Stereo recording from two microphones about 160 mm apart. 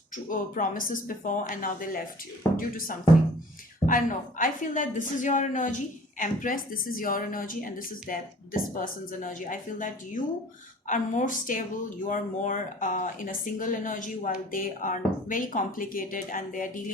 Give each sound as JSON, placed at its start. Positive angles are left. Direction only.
{"t": 0.3, "sound": "a woman's voice", "side_deg": 55}